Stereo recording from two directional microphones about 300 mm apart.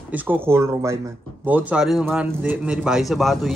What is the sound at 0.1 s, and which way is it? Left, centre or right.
A man's voice, centre.